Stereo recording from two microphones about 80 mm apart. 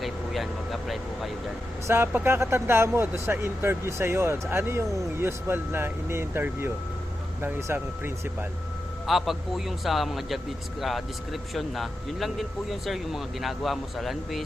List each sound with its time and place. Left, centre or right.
0.0 s vehicle: centre
1.9 s speech: right
9.0 s a man's voice: centre